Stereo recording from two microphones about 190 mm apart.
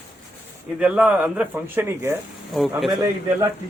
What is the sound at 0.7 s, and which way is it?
Speech, 5° right (ahead or behind).